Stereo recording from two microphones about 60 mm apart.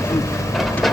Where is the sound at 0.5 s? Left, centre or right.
Centre.